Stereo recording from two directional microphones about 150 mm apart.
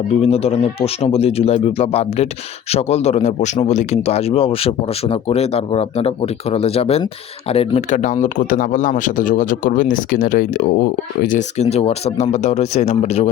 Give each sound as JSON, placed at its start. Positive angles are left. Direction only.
{"t": 0.2, "sound": "a man's voice", "side_deg": 45}